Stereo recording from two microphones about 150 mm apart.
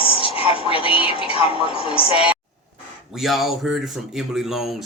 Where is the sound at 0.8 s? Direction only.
35° left (ahead or behind).